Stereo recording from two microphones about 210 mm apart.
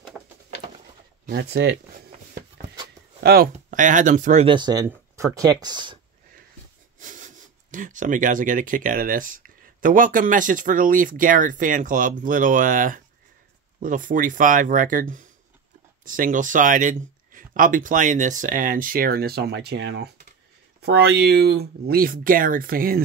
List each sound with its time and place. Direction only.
1.2 s speech: 50° right (ahead or behind)
3.2 s speech: 50° right (ahead or behind)
3.5 s speech: 35° right (ahead or behind); by 5.9 s 20° right (ahead or behind)
7.0 s speech: 35° right (ahead or behind)